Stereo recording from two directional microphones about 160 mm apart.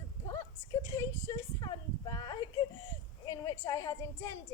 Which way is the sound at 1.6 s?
25° left (ahead or behind).